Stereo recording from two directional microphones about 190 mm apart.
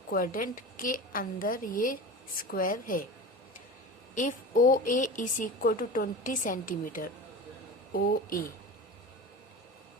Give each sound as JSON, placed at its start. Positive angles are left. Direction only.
{"t": 0.1, "sound": "a woman's voice", "side_deg": 50}
{"t": 4.1, "sound": "a woman's voice", "side_deg": 40}